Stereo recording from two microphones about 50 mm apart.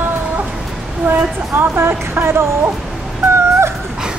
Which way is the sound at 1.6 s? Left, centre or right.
Right.